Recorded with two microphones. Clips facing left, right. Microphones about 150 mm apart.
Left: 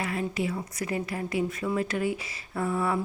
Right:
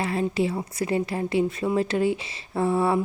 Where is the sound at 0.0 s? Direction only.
30° right (ahead or behind).